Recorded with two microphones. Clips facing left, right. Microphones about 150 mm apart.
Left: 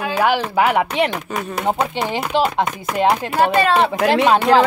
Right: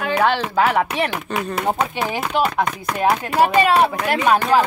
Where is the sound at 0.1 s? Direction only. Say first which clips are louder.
Even; 10° left (ahead or behind).